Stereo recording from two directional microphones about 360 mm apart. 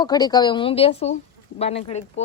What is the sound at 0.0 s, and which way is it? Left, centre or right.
A woman's voice, centre.